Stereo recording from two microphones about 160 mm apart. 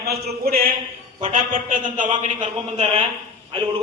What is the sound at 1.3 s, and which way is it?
A man's voice, 55° right (ahead or behind).